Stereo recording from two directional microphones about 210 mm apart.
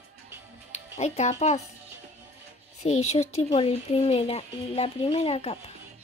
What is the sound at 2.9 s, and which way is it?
Speech, 30° left (ahead or behind).